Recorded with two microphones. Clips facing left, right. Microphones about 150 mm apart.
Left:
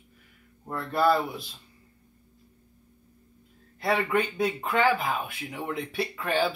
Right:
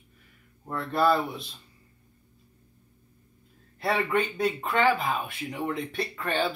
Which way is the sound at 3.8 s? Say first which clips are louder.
Even; centre (ahead or behind).